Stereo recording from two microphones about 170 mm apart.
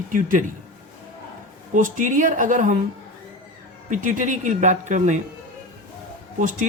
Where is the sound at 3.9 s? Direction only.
50° right (ahead or behind).